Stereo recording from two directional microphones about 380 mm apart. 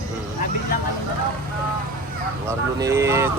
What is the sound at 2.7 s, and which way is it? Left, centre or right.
Speech, centre.